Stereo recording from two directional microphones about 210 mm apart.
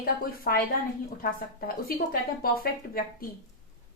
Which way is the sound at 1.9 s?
45° left (ahead or behind).